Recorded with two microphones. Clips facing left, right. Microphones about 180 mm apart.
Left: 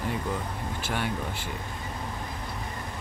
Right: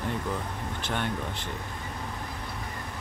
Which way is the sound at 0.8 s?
5° left (ahead or behind).